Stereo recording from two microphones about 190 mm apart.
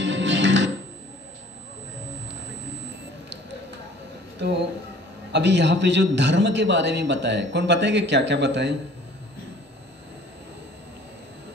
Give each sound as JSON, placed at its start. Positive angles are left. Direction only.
{"t": 0.0, "sound": "music", "side_deg": -75}
{"t": 4.4, "sound": "a man's voice", "side_deg": -65}